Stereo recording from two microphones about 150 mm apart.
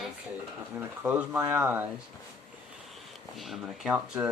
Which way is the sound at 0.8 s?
10° right (ahead or behind).